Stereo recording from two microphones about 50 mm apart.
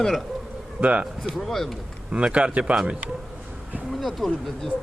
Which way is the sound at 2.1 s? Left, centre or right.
Right.